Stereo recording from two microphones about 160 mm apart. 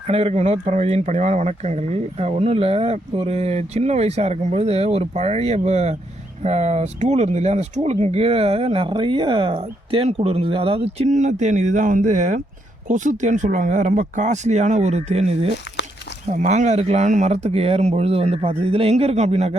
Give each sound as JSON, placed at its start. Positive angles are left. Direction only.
{"t": 0.1, "sound": "speech", "side_deg": -40}